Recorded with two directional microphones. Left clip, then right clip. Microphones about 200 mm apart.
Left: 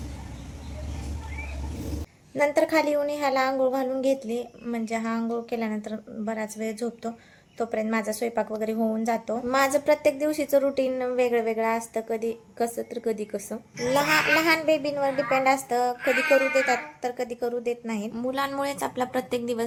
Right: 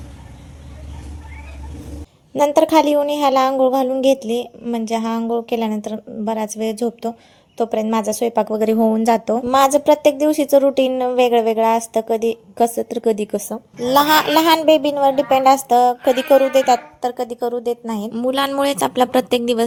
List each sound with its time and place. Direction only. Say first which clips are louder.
2.3 s a woman's voice: right 9 dB; 35° right (ahead or behind)